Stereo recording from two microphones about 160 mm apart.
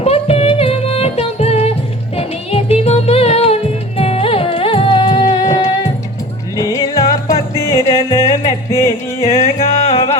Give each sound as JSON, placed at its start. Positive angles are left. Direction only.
{"t": 0.0, "sound": "music", "side_deg": 40}
{"t": 9.2, "sound": "music", "side_deg": 45}